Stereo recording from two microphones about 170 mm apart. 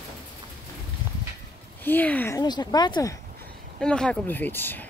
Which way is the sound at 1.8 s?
10° left (ahead or behind).